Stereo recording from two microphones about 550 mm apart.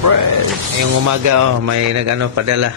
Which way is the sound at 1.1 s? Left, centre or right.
Right.